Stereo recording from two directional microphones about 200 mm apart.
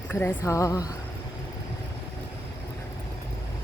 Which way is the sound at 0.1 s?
10° left (ahead or behind).